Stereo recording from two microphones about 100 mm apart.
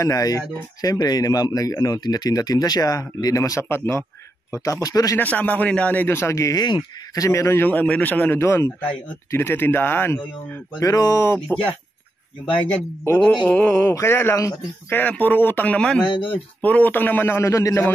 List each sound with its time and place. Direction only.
0.0 s speech: 35° left (ahead or behind)
5.1 s a man's voice: 15° left (ahead or behind)
10.8 s speech: 35° left (ahead or behind)
13.2 s a man's voice: 10° left (ahead or behind); by 14.5 s 30° left (ahead or behind)
14.9 s a man's voice: 15° left (ahead or behind)
16.1 s speech: 60° left (ahead or behind)
16.6 s a man's voice: 15° left (ahead or behind)